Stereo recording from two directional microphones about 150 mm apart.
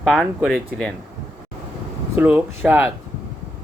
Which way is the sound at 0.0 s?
5° left (ahead or behind).